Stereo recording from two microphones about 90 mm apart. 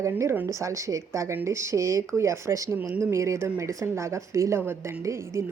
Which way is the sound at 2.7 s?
20° right (ahead or behind).